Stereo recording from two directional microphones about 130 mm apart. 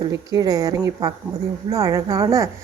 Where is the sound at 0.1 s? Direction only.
25° right (ahead or behind).